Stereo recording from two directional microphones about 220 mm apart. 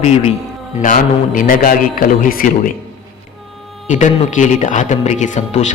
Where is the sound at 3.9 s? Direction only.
35° left (ahead or behind).